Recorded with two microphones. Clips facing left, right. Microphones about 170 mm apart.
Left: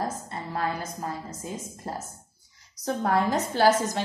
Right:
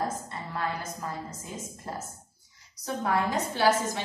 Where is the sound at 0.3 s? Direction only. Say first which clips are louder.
Left 3 dB; 35° left (ahead or behind).